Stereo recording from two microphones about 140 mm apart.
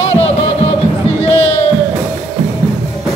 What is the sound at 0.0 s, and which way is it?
Music, 45° left (ahead or behind).